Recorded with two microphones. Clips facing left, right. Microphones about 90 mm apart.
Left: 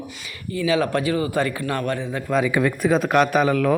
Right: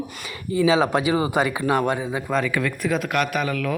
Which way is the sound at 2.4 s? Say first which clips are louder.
Left 4 dB; 20° left (ahead or behind).